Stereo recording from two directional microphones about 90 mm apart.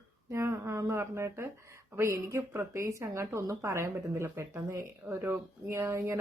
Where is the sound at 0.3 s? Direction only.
30° right (ahead or behind).